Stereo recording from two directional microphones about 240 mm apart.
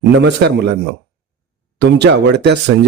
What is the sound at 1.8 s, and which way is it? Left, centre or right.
Speech, right.